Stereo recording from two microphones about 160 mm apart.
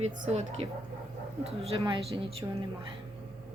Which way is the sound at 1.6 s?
30° right (ahead or behind).